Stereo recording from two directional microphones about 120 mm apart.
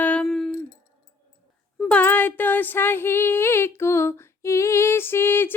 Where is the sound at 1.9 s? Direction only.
15° left (ahead or behind).